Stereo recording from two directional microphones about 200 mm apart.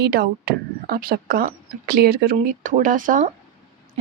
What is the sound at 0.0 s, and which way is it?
Speech, 50° right (ahead or behind).